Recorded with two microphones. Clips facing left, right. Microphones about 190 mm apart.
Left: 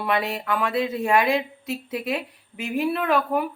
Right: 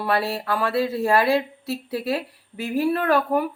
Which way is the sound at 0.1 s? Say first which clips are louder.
Right 1 dB; 35° right (ahead or behind).